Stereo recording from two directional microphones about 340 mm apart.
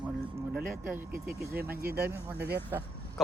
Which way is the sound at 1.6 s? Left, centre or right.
Right.